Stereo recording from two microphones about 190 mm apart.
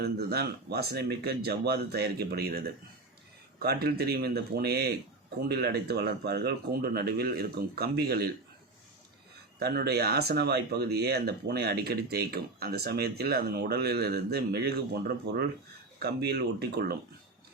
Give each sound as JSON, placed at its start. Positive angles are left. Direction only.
{"t": 0.0, "sound": "speech", "side_deg": -55}
{"t": 9.6, "sound": "speech", "side_deg": -55}